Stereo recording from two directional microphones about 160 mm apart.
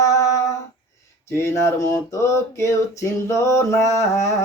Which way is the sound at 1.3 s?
15° left (ahead or behind).